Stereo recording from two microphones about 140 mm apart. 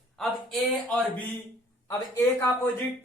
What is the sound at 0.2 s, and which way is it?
Speech, 5° left (ahead or behind).